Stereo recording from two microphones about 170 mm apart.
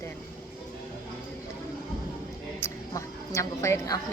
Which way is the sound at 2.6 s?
20° left (ahead or behind).